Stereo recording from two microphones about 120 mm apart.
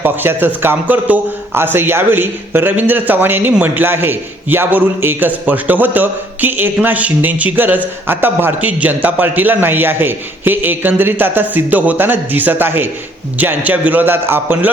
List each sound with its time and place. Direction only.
0.0 s a man's voice: 15° right (ahead or behind)